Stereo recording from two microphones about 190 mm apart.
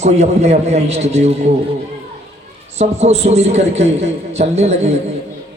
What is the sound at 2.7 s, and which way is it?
A man's voice, 35° right (ahead or behind).